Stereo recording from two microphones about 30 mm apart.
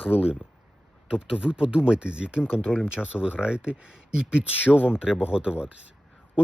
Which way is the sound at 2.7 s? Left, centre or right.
Centre.